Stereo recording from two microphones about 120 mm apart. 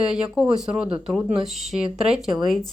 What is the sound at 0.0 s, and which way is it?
Speech, 5° right (ahead or behind).